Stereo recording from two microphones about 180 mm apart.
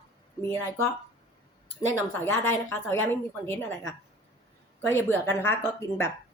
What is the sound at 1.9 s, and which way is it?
Speech, 15° left (ahead or behind).